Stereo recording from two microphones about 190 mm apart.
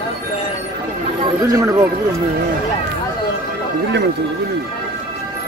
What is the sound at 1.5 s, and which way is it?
Speech, 15° right (ahead or behind).